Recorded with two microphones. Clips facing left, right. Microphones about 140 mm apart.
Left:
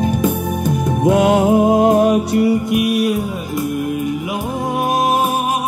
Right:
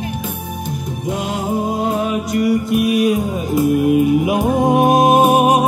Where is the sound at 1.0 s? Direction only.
60° left (ahead or behind).